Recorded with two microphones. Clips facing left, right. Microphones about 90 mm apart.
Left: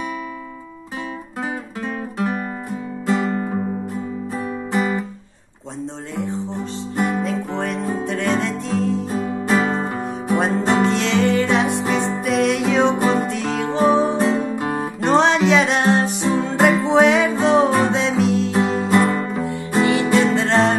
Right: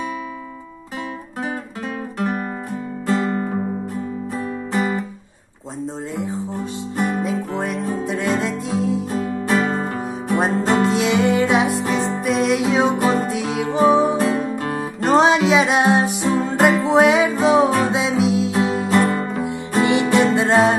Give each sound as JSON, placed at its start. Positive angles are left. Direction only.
{"t": 3.1, "sound": "music", "side_deg": 5}
{"t": 4.7, "sound": "music", "side_deg": 0}
{"t": 7.0, "sound": "music", "side_deg": 0}
{"t": 14.7, "sound": "music", "side_deg": 0}
{"t": 16.3, "sound": "music", "side_deg": 0}
{"t": 19.8, "sound": "music", "side_deg": -20}